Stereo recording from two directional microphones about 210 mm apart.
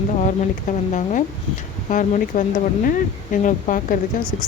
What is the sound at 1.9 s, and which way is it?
Speech, 40° left (ahead or behind).